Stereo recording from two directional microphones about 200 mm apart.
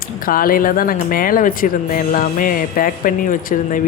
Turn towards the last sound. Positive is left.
turn(degrees=40)  # may be behind; listen again after turning